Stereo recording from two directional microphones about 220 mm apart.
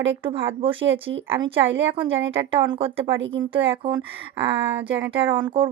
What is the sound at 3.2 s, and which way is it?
Speech, 55° right (ahead or behind).